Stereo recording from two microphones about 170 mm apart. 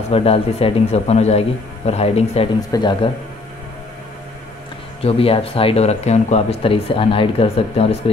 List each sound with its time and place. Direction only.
0.1 s speech: 35° left (ahead or behind)
2.7 s speech: 25° left (ahead or behind)
5.0 s speech: 35° left (ahead or behind)